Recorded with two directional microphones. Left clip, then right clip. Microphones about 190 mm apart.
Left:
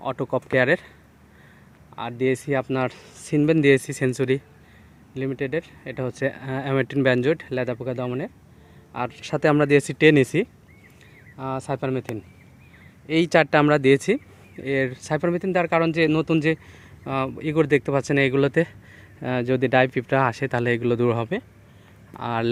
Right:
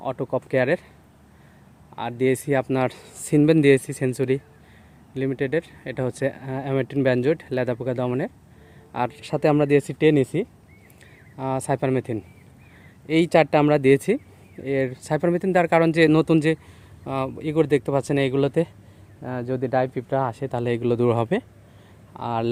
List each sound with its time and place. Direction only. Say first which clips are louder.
0.0 s speech: even; 5° right (ahead or behind)
2.0 s speech: right 1 dB; 20° right (ahead or behind)
5.1 s speech: right 2 dB; 25° right (ahead or behind); by 10.5 s centre (ahead or behind)
11.3 s speech: right 3 dB; 30° right (ahead or behind)
13.1 s speech: right 1 dB; 15° right (ahead or behind)
17.0 s speech: left 1 dB; 5° right (ahead or behind)
19.2 s speech: left 4 dB; 15° left (ahead or behind); by 22.4 s 5° right (ahead or behind)